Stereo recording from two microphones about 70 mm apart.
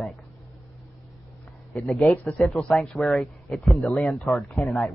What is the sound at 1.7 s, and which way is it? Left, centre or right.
A man's voice, centre.